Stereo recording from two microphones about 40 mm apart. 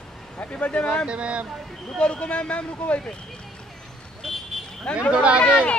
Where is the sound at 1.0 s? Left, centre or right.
Right.